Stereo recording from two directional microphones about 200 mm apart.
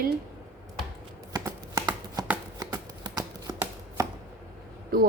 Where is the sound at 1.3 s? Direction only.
20° right (ahead or behind).